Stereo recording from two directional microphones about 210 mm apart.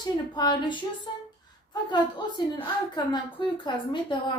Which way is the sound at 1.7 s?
20° left (ahead or behind).